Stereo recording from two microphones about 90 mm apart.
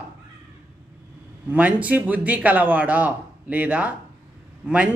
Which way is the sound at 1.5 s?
15° right (ahead or behind).